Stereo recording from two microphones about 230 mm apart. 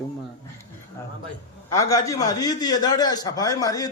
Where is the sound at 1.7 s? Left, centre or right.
Centre.